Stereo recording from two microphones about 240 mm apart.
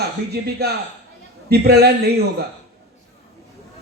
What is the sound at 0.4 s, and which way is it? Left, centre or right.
A man's voice, right.